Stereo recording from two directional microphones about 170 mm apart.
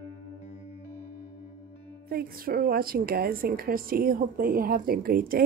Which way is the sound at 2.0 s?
65° right (ahead or behind).